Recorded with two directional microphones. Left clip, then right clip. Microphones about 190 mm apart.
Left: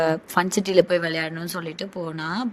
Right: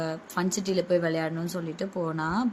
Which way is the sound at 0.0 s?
45° left (ahead or behind).